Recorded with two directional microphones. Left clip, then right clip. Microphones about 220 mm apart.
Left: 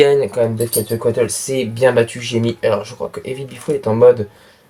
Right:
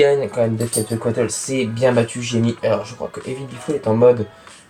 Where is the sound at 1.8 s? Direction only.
45° left (ahead or behind).